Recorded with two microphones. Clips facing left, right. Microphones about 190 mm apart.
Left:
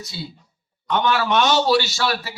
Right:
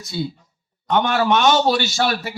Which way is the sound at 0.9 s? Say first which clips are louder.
Right 3 dB; 50° right (ahead or behind).